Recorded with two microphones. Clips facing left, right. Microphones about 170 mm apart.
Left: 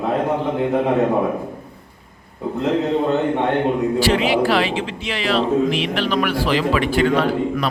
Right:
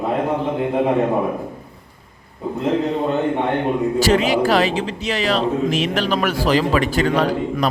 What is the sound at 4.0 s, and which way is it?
A man's voice, 40° right (ahead or behind).